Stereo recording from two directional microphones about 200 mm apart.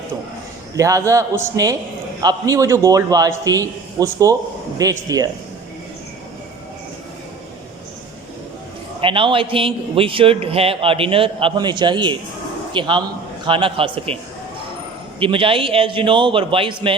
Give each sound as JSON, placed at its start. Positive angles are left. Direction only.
{"t": 0.8, "sound": "a man's voice", "side_deg": -15}
{"t": 9.0, "sound": "a man's voice", "side_deg": -25}
{"t": 15.2, "sound": "a man's voice", "side_deg": -25}